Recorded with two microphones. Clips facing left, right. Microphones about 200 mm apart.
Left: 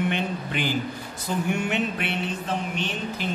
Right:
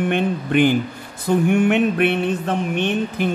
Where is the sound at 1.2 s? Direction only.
55° right (ahead or behind).